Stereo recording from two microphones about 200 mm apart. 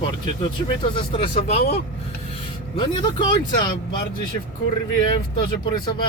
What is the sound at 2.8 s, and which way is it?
Speech, 25° left (ahead or behind).